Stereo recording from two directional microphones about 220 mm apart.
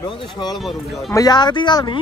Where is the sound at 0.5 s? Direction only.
Centre (ahead or behind).